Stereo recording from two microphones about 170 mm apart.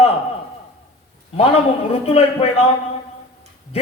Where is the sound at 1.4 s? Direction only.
35° left (ahead or behind).